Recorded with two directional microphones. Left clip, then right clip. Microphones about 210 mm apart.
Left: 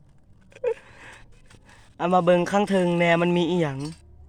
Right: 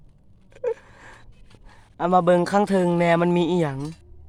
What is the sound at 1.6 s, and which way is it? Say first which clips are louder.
A man's voice: right 2 dB; 5° right (ahead or behind).